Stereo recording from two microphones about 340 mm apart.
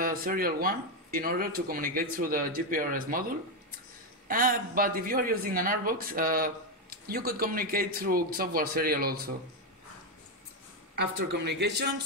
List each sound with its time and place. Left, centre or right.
0.0 s speech: right
4.3 s speech: right
11.0 s speech: right